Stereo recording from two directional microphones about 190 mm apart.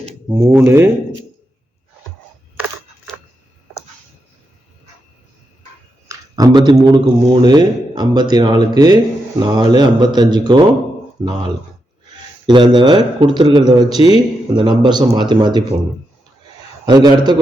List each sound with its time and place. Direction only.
0.3 s speech: 10° right (ahead or behind)
3.1 s a sound: centre (ahead or behind)
6.1 s a man's voice: 20° right (ahead or behind)
12.5 s a man's voice: 25° right (ahead or behind)
16.8 s a man's voice: 20° right (ahead or behind)